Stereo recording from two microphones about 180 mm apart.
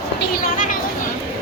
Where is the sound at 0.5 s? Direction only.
50° left (ahead or behind).